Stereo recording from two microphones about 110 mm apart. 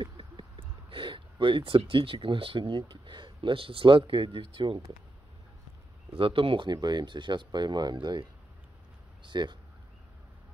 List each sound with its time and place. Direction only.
0.0 s speech: 50° right (ahead or behind)
6.1 s speech: 55° right (ahead or behind)